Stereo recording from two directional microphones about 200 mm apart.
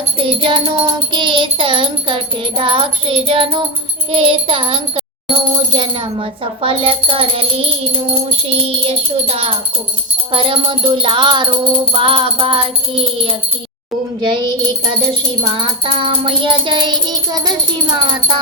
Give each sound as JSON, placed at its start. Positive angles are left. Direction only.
{"t": 0.2, "sound": "music", "side_deg": -25}